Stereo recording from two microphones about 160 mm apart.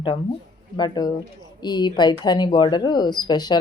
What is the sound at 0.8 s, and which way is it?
Speech, 25° left (ahead or behind).